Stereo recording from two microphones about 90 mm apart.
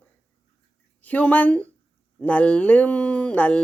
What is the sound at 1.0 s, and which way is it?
Speech, 15° left (ahead or behind).